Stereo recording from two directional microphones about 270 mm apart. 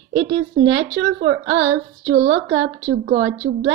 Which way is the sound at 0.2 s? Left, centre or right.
Right.